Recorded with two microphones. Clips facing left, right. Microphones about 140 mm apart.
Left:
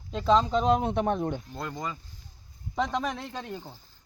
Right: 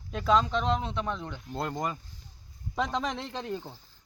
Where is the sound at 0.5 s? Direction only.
45° left (ahead or behind).